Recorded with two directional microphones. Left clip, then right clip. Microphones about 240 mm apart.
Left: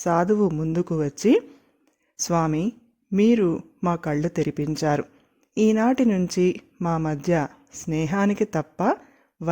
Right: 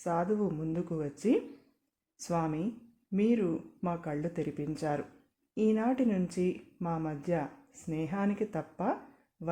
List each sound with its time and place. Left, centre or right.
0.0 s speech: left